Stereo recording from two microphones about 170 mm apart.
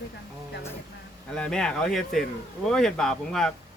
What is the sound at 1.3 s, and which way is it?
Speech, 5° left (ahead or behind).